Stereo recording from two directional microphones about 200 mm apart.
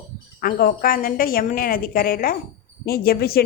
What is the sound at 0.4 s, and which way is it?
A woman's voice, 45° left (ahead or behind).